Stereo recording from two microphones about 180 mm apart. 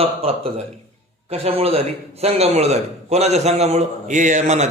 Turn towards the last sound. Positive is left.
turn(degrees=-40)  # may be behind; listen again after turning